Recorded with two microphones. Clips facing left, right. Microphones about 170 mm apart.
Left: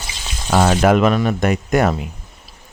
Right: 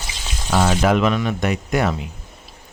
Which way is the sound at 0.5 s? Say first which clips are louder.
Left 3 dB; 50° left (ahead or behind).